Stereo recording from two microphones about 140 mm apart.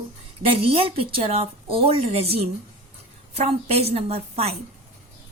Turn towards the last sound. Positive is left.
turn(degrees=-45)  # may be behind; listen again after turning